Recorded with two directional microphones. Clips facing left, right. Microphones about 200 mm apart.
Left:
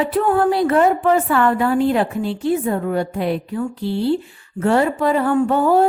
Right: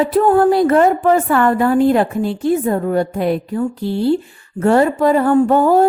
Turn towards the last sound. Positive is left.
turn(degrees=-45)  # may be behind; listen again after turning